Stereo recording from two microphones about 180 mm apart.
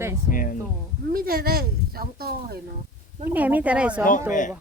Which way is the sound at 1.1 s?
55° right (ahead or behind).